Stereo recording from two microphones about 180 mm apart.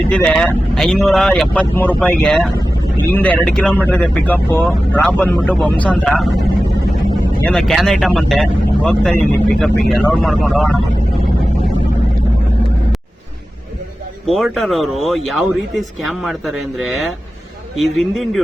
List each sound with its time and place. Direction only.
0.1 s speech: 5° left (ahead or behind)
7.5 s speech: centre (ahead or behind)
14.3 s speech: centre (ahead or behind)